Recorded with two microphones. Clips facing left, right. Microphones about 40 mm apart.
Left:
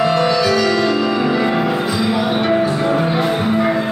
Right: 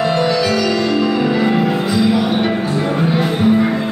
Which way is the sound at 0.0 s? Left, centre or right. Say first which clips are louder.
Left 1 dB; centre.